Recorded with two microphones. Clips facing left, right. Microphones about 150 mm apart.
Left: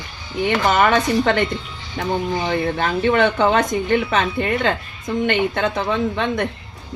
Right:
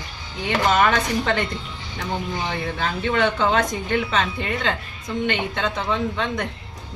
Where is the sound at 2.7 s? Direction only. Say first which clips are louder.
Left 4 dB; 55° left (ahead or behind).